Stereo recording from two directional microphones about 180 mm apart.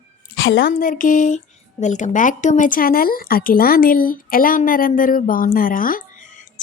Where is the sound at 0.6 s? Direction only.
50° left (ahead or behind).